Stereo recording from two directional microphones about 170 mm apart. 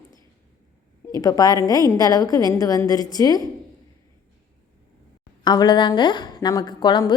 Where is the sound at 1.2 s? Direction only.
20° left (ahead or behind).